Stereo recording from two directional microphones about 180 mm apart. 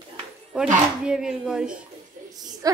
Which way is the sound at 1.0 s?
5° right (ahead or behind).